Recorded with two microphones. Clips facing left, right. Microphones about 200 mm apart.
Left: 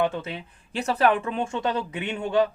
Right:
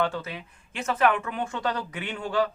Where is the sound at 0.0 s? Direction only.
25° left (ahead or behind).